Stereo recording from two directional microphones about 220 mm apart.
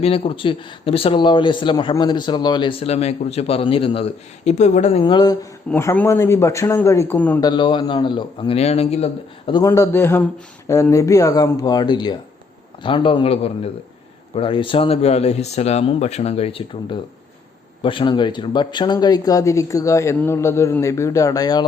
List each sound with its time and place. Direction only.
0.0 s speech: 25° left (ahead or behind); by 7.3 s 10° left (ahead or behind)
7.4 s speech: 20° left (ahead or behind)
9.5 s speech: 15° left (ahead or behind)